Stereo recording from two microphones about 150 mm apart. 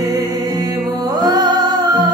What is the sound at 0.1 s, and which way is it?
Music, 25° right (ahead or behind).